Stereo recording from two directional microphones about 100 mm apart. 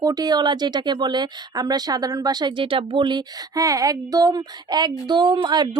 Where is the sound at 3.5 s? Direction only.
35° right (ahead or behind).